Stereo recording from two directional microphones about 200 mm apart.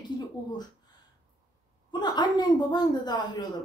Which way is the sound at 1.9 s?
20° left (ahead or behind).